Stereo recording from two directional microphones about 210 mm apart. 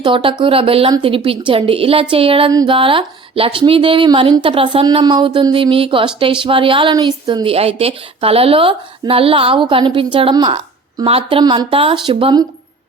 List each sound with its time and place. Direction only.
0.0 s speech: 25° right (ahead or behind)